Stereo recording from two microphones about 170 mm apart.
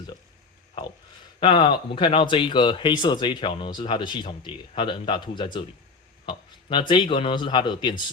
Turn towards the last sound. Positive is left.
turn(degrees=25)  # may be behind; listen again after turning